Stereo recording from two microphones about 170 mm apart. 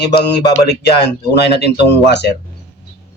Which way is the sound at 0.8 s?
75° left (ahead or behind).